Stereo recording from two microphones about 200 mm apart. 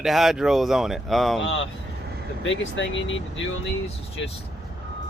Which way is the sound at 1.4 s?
75° left (ahead or behind).